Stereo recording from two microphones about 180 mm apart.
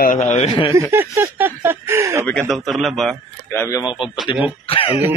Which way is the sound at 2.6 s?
Centre (ahead or behind).